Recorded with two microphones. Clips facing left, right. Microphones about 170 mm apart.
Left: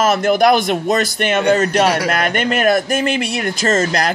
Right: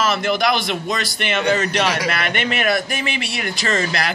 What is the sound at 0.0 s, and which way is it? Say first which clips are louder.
Speech: left 6 dB; 45° left (ahead or behind).